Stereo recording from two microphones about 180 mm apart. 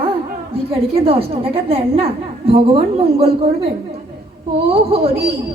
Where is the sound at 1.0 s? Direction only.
30° right (ahead or behind).